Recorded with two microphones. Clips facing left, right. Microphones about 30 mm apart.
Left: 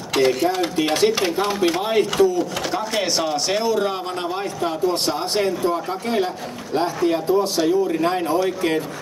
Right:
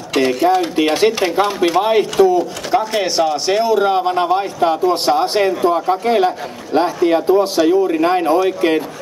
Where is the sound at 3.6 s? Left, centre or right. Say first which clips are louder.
Right 7 dB; centre.